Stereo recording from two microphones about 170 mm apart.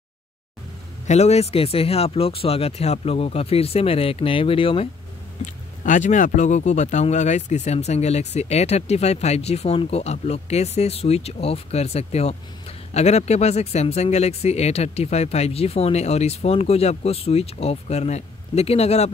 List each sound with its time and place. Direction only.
1.0 s speech: 40° left (ahead or behind)
5.9 s speech: 45° left (ahead or behind)